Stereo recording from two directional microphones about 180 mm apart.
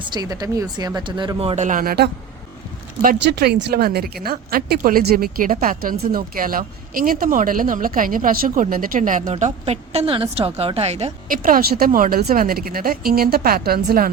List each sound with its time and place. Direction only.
0.0 s speech: 20° right (ahead or behind); by 2.0 s 55° right (ahead or behind)
3.2 s speech: 65° right (ahead or behind); by 11.1 s 35° right (ahead or behind)
11.3 s speech: 50° right (ahead or behind)